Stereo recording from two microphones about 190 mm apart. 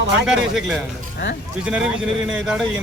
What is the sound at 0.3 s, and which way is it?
Speech, centre (ahead or behind).